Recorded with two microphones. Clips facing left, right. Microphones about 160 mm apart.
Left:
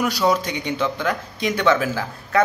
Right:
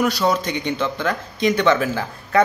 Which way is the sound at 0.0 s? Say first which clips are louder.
Right 1 dB; 10° left (ahead or behind).